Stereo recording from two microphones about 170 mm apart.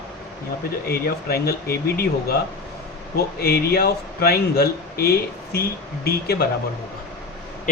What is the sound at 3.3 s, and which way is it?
Speech, 65° left (ahead or behind).